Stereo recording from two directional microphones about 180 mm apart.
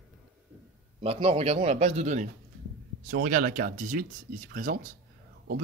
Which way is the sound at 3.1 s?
50° right (ahead or behind).